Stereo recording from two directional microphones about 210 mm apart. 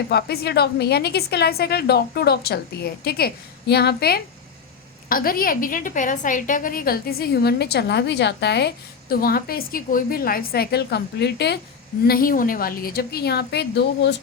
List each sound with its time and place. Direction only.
0.1 s a woman's voice: 50° left (ahead or behind)